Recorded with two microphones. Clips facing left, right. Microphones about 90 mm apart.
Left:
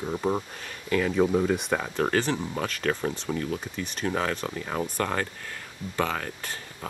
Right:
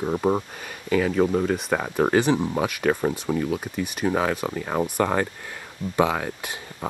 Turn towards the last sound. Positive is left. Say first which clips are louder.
# right 5 dB
turn(degrees=-15)  # may be behind; listen again after turning